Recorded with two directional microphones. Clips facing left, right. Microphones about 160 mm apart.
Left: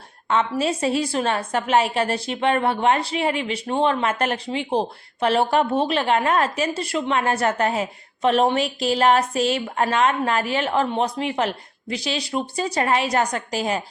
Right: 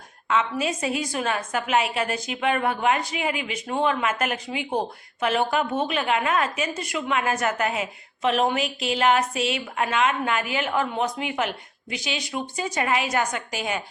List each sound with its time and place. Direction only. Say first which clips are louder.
0.3 s a woman's voice: left 3 dB; 35° left (ahead or behind)